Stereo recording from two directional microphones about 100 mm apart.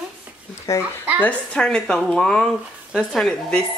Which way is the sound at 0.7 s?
30° left (ahead or behind).